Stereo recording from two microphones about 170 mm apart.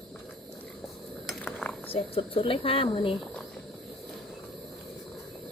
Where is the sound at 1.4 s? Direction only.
5° left (ahead or behind).